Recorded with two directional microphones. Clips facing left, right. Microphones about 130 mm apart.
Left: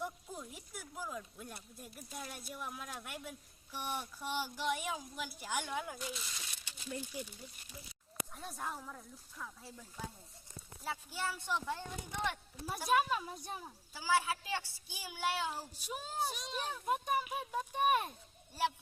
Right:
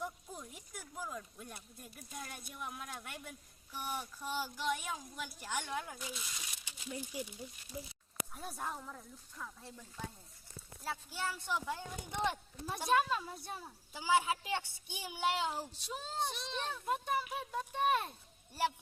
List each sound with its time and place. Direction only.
0.0 s speech: 5° left (ahead or behind)
4.2 s speech: 10° left (ahead or behind)
6.7 s speech: 15° right (ahead or behind)
8.3 s speech: 5° right (ahead or behind)
10.8 s speech: centre (ahead or behind)
12.9 s speech: 15° left (ahead or behind)
13.9 s a woman's voice: 15° right (ahead or behind)
15.7 s speech: 10° left (ahead or behind)